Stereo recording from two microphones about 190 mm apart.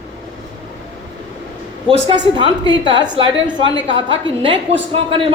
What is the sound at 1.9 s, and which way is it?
A woman's voice, 25° right (ahead or behind).